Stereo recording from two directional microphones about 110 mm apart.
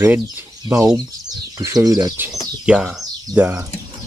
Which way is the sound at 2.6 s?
5° right (ahead or behind).